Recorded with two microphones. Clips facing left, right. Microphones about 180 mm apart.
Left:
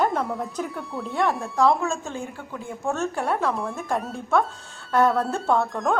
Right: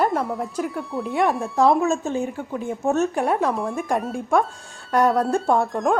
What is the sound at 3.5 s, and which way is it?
Speech, centre (ahead or behind).